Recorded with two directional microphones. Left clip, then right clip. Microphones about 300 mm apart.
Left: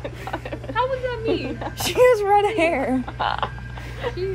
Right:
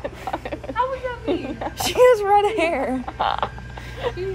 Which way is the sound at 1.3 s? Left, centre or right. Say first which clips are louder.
Right 3 dB; right.